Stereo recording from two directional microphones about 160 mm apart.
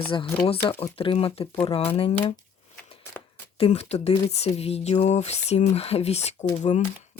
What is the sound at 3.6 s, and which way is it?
Speech, 40° left (ahead or behind).